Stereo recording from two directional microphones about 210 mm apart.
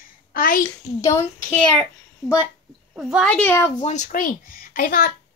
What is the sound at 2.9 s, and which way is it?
Speech, centre (ahead or behind).